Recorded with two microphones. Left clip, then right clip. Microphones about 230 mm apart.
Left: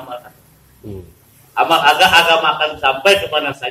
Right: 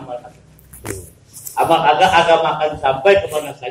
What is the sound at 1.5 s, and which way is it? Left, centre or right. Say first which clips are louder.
A man's voice: left 1 dB; centre.